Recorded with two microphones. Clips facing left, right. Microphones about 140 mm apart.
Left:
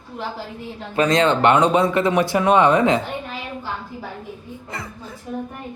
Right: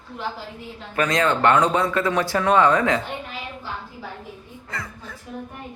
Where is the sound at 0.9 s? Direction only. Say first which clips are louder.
Left 4 dB; 25° left (ahead or behind).